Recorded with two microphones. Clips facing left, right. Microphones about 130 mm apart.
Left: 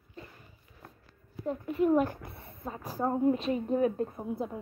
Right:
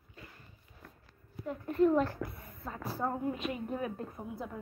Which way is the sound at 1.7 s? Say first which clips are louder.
Left 1 dB; 10° left (ahead or behind).